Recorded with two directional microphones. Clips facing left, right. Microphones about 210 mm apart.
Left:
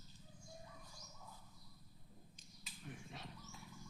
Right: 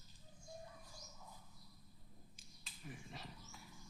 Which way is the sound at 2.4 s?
Centre (ahead or behind).